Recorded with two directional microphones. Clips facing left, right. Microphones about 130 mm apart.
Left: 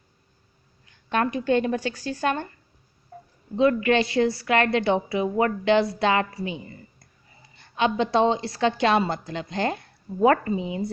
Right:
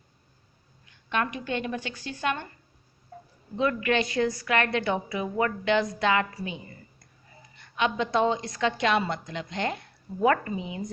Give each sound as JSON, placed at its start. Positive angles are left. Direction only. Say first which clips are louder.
{"t": 1.1, "sound": "a woman's voice", "louder": "left 7 dB", "side_deg": 35}
{"t": 3.6, "sound": "a woman's voice", "louder": "left 5 dB", "side_deg": 30}